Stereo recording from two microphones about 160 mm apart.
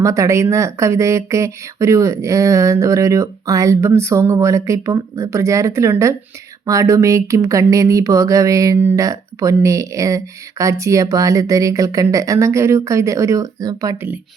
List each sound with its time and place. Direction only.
0.0 s speech: 20° right (ahead or behind)